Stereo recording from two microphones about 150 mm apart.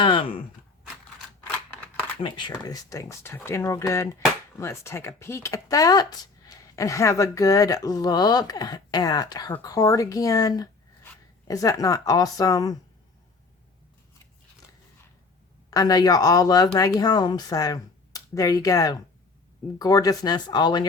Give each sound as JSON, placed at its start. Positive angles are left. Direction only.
{"t": 0.0, "sound": "speech", "side_deg": 35}
{"t": 2.2, "sound": "speech", "side_deg": 35}
{"t": 15.7, "sound": "speech", "side_deg": 25}